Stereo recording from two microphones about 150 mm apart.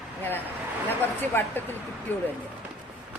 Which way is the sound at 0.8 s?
15° left (ahead or behind).